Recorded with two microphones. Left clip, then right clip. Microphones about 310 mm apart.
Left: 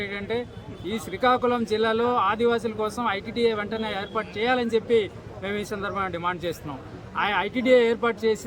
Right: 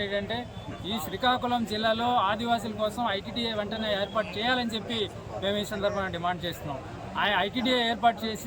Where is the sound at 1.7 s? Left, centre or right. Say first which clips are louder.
Left 3 dB; centre.